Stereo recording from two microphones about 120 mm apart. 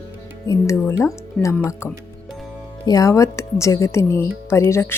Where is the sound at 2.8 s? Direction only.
30° left (ahead or behind).